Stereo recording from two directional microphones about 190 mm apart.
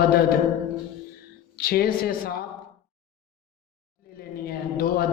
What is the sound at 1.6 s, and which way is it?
Speech, 50° left (ahead or behind).